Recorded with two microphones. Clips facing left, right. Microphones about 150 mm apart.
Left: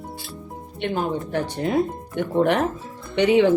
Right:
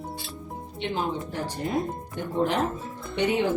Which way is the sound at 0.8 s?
55° left (ahead or behind).